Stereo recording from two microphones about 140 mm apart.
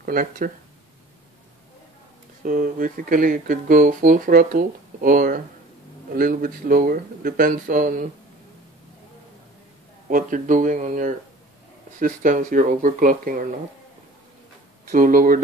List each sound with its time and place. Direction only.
0.0 s speech: 85° right
2.4 s speech: 80° right
10.0 s speech: 70° right (ahead or behind)
14.9 s speech: 70° right (ahead or behind)